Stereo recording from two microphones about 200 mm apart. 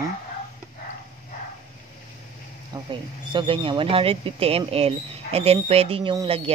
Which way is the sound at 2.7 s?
25° right (ahead or behind).